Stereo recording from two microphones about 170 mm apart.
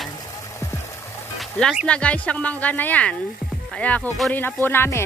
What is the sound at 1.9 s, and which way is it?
Speech, 5° left (ahead or behind).